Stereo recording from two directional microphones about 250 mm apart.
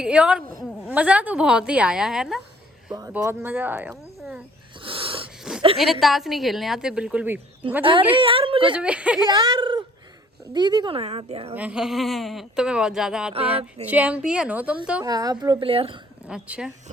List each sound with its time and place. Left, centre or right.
0.0 s speech: centre
2.9 s a woman's voice: centre
4.8 s wheeze: right
5.4 s a sound: centre
5.8 s speech: centre
8.1 s a woman's voice: right
8.7 s speech: centre
9.3 s a woman's voice: centre
11.5 s speech: centre
13.3 s a woman's voice: right
13.8 s a woman's voice: centre; by 16.0 s right
16.2 s speech: centre